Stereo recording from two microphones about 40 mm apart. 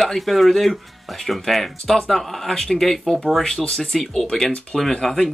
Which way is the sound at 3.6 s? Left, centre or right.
Left.